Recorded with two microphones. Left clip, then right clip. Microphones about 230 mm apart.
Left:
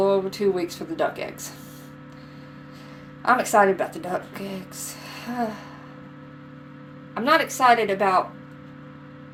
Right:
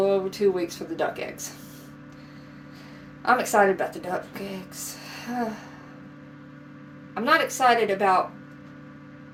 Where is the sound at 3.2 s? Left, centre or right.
Left.